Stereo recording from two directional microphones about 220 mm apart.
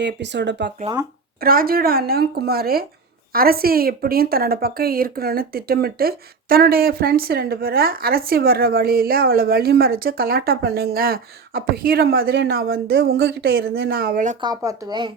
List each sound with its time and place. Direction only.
0.0 s speech: 50° right (ahead or behind)
1.4 s speech: 40° right (ahead or behind)
14.4 s speech: 15° right (ahead or behind)